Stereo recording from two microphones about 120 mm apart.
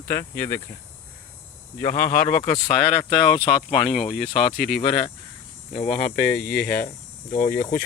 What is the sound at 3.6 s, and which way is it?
Speech, 60° left (ahead or behind).